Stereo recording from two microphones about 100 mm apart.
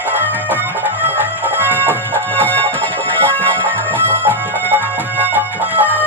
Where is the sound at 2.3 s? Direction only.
15° left (ahead or behind).